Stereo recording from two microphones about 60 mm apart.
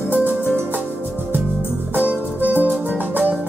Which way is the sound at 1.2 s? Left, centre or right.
Right.